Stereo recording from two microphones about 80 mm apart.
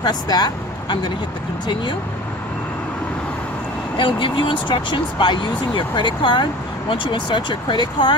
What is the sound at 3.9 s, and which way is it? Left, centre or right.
Speech, left.